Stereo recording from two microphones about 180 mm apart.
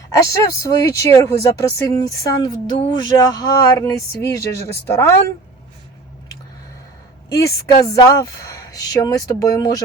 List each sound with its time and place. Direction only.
0.3 s speech: 20° left (ahead or behind)
7.4 s speech: 20° left (ahead or behind)